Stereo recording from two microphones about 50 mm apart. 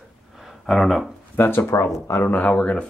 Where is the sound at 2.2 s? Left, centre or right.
Left.